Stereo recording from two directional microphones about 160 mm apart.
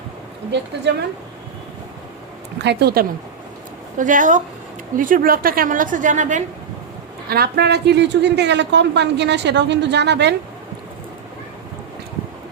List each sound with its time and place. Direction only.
0.5 s a woman's voice: 90° right
2.6 s speech: 90° right
3.9 s a woman's voice: 55° right (ahead or behind)
7.3 s a woman's voice: 75° right (ahead or behind); by 10.3 s 90° right